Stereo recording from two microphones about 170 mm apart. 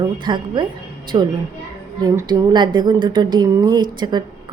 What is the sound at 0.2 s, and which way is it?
Speech, 25° right (ahead or behind).